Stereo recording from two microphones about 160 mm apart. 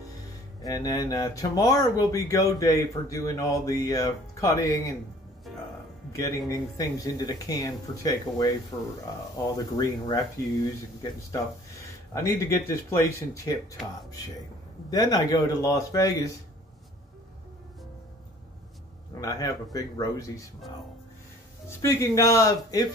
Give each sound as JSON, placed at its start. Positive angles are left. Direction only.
{"t": 0.6, "sound": "speech", "side_deg": 25}
{"t": 6.1, "sound": "speech", "side_deg": 20}
{"t": 9.6, "sound": "speech", "side_deg": 25}
{"t": 12.1, "sound": "speech", "side_deg": 20}
{"t": 19.1, "sound": "speech", "side_deg": 20}
{"t": 21.6, "sound": "speech", "side_deg": 20}